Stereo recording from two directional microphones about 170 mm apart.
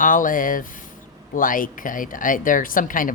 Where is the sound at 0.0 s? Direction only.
50° left (ahead or behind).